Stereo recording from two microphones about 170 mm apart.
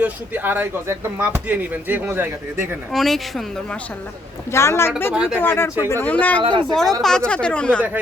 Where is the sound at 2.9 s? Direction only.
Centre (ahead or behind).